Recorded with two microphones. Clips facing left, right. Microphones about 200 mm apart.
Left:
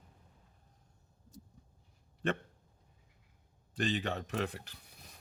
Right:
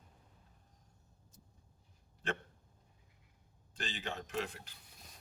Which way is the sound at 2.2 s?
60° left (ahead or behind).